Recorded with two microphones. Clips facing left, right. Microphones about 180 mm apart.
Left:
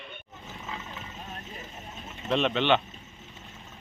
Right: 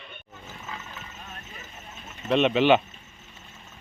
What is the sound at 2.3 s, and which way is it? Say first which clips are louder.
Speech: right 5 dB; 5° right (ahead or behind).